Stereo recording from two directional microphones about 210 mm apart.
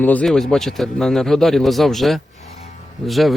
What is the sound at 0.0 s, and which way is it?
Speech, 5° left (ahead or behind).